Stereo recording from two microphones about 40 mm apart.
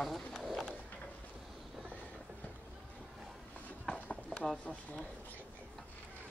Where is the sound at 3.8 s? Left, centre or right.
Left.